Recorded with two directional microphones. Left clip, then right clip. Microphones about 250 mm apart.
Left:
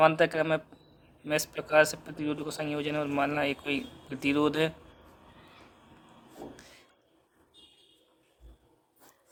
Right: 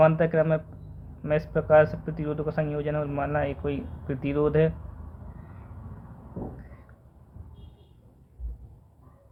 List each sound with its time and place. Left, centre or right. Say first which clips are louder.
0.0 s speech: right 3 dB; left